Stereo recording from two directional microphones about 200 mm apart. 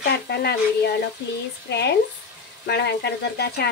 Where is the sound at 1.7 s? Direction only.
55° left (ahead or behind).